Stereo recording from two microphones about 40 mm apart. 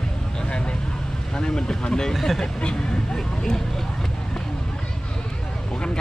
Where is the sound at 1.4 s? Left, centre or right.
Centre.